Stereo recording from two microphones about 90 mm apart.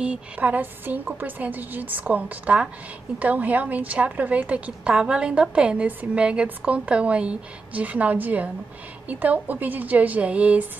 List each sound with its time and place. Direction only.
0.0 s a woman's voice: 15° right (ahead or behind)